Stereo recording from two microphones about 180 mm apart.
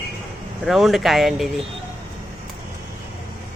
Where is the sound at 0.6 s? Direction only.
Centre (ahead or behind).